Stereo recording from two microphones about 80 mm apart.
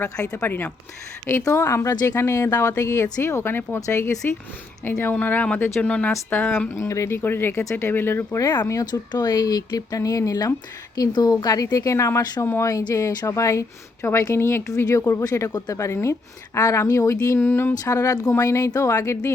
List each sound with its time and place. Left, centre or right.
0.4 s speech: left
1.5 s speech: left
3.8 s speech: left
4.2 s speech: left
6.7 s speech: left
7.6 s speech: left
7.9 s speech: left
8.4 s speech: left
8.6 s speech: left
8.9 s speech: left
14.8 s speech: left
15.8 s speech: left
16.6 s speech: left
17.3 s speech: left